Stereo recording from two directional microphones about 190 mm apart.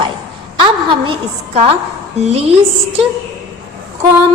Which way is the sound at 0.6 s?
25° right (ahead or behind).